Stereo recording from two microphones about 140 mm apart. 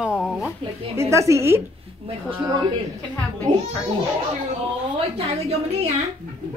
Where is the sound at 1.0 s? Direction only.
20° right (ahead or behind).